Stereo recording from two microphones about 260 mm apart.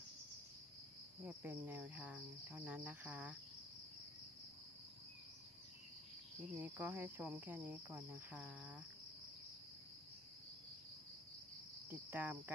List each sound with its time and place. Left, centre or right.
1.2 s cricket: centre
6.6 s cricket: centre
11.9 s cricket: centre